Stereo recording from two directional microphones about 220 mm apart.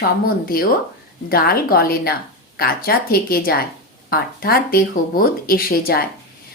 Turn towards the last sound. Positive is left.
turn(degrees=45)  # may be behind; listen again after turning